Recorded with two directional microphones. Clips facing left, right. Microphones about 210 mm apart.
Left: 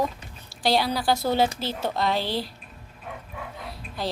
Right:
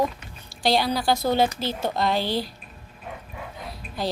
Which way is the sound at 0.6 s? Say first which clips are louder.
Right 1 dB; 5° left (ahead or behind).